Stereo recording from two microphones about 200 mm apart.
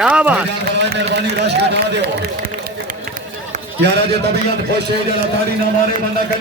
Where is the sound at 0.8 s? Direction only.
60° right (ahead or behind).